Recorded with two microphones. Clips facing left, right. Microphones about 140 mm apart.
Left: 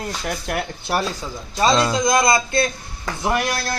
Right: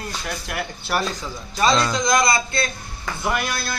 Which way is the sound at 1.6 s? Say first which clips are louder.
Left 2 dB; 30° left (ahead or behind).